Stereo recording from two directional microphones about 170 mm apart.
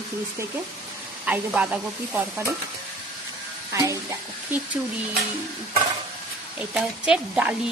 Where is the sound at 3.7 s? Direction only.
20° right (ahead or behind).